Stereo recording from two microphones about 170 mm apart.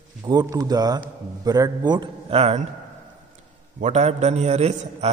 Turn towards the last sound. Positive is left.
turn(degrees=-40)  # may be behind; listen again after turning